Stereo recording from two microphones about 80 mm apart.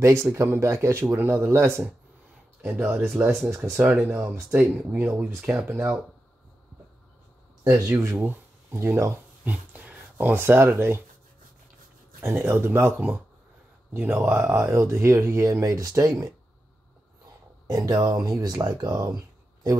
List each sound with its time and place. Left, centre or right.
0.0 s speech: right
3.8 s speech: centre
4.1 s speech: right
7.6 s speech: right
9.4 s speech: centre
12.4 s speech: right
14.7 s speech: right
17.6 s speech: right